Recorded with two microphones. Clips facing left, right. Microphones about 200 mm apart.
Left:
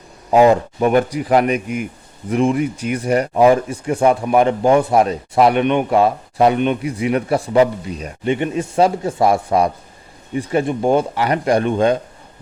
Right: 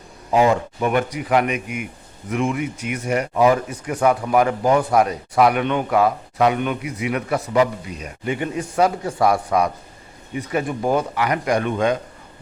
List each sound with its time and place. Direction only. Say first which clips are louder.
0.3 s speech: left 5 dB; 40° left (ahead or behind)